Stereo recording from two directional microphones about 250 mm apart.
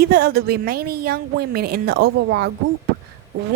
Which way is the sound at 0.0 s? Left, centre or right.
Right.